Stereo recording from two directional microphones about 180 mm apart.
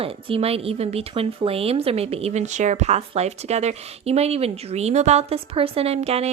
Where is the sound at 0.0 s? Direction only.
30° right (ahead or behind).